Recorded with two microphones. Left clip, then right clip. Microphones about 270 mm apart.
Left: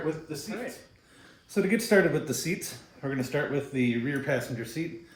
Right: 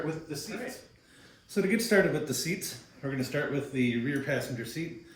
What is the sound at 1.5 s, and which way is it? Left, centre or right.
Speech, left.